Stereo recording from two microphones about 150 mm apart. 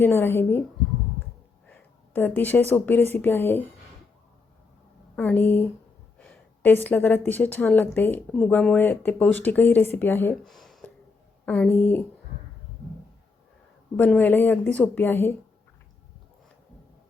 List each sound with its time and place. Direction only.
0.0 s speech: 15° left (ahead or behind)
1.7 s a woman's voice: 10° left (ahead or behind)
5.1 s a woman's voice: 10° left (ahead or behind)
10.4 s a sound: centre (ahead or behind)
11.4 s speech: 10° left (ahead or behind)
13.9 s speech: 10° left (ahead or behind)